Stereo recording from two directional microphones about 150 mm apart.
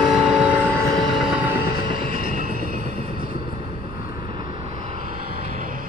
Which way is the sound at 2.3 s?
70° right (ahead or behind).